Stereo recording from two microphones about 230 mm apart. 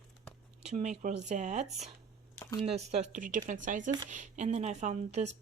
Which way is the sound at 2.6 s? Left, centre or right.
Right.